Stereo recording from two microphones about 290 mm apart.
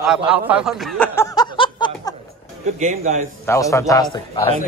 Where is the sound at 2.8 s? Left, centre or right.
Right.